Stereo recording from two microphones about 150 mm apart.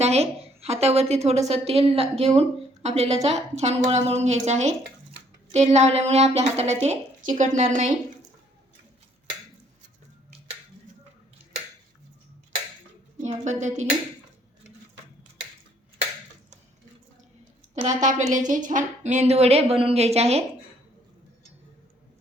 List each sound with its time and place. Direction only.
0.0 s a woman's voice: 45° right (ahead or behind)
13.2 s a woman's voice: 55° right (ahead or behind)
17.7 s a woman's voice: 55° right (ahead or behind)